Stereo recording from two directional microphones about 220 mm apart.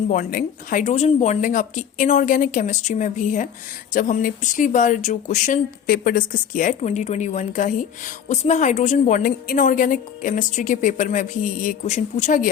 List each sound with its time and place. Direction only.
0.1 s speech: 40° left (ahead or behind)